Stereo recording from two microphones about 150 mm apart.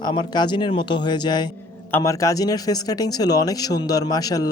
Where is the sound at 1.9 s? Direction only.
15° left (ahead or behind).